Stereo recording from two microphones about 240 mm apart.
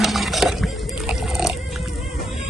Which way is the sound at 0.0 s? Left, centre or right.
Centre.